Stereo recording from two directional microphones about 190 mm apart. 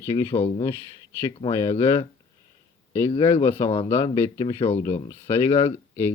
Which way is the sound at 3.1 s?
30° left (ahead or behind).